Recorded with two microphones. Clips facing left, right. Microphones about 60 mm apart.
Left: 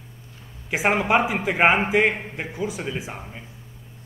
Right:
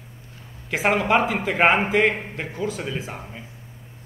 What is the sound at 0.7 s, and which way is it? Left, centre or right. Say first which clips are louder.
A man's voice: even; centre.